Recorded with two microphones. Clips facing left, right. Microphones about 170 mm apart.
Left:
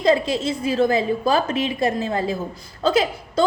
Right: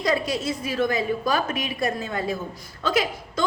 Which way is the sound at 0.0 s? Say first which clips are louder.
Left 5 dB; 25° left (ahead or behind).